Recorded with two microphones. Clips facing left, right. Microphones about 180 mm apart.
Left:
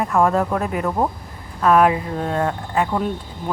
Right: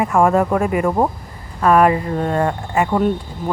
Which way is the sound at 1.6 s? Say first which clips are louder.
Right 2 dB; centre (ahead or behind).